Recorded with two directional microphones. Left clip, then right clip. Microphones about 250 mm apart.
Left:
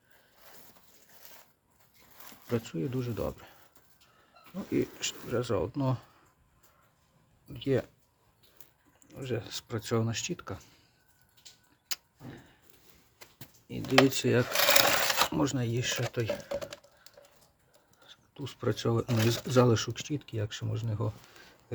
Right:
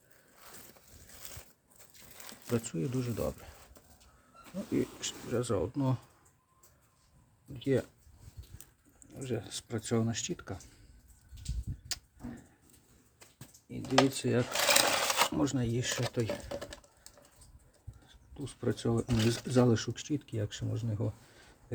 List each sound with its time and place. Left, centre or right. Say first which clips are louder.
2.5 s speech: left 1 dB; centre
4.7 s speech: left 3 dB; centre
7.4 s speech: left 1 dB; centre
9.0 s speech: left 2 dB; centre
13.2 s a sound: left 5 dB; left
14.1 s speech: left 4 dB; centre
14.5 s sewing machine: left 2 dB; left
15.4 s speech: left 2 dB; centre
16.5 s typing: left 5 dB; left
18.1 s speech: left 2 dB; centre
19.0 s speech: left 2 dB; left
19.5 s speech: left 4 dB; centre